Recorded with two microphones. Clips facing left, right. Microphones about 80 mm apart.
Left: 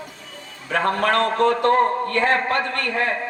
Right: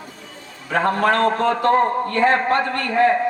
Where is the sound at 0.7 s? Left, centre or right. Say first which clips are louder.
Right 2 dB; right.